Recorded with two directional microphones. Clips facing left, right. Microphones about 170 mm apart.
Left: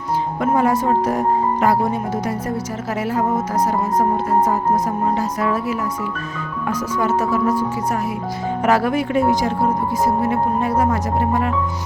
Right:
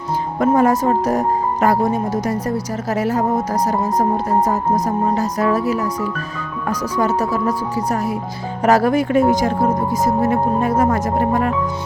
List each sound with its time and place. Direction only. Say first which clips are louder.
0.3 s speech: right 4 dB; 45° right (ahead or behind)
5.1 s speech: right 3 dB; 40° right (ahead or behind)
8.6 s speech: right 4 dB; 40° right (ahead or behind)